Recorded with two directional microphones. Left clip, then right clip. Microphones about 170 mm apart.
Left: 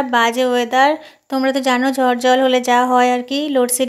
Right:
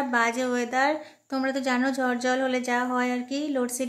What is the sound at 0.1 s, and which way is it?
A woman's voice, 30° left (ahead or behind).